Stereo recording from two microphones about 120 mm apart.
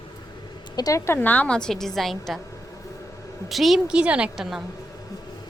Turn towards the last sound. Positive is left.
turn(degrees=-5)  # may be behind; listen again after turning